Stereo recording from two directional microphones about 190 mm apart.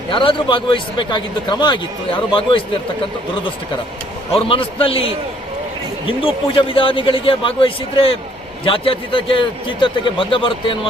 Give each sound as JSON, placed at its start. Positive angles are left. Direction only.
{"t": 0.1, "sound": "a man's voice", "side_deg": 25}
{"t": 4.3, "sound": "a man's voice", "side_deg": 30}